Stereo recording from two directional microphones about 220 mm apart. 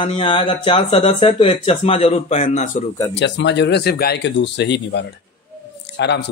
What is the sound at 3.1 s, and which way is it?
Speech, 55° left (ahead or behind).